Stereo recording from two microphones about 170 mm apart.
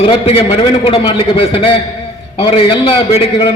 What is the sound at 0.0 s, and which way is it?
A man's voice, 30° left (ahead or behind).